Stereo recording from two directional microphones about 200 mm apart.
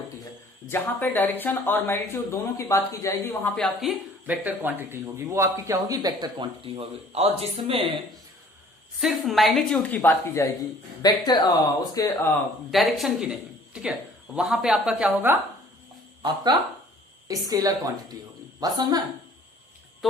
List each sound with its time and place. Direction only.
0.7 s speech: 10° left (ahead or behind); by 7.9 s 30° right (ahead or behind)
9.0 s a woman's voice: centre (ahead or behind); by 12.3 s 15° left (ahead or behind)
12.7 s a woman's voice: centre (ahead or behind)
16.2 s speech: 20° right (ahead or behind)